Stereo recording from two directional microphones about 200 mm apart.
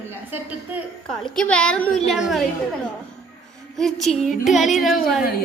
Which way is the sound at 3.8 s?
Centre (ahead or behind).